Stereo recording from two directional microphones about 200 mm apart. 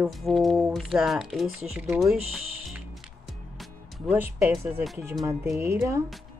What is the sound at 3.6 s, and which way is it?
Music, 5° right (ahead or behind).